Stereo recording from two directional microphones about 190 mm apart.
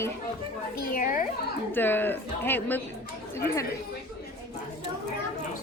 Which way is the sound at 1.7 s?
10° left (ahead or behind).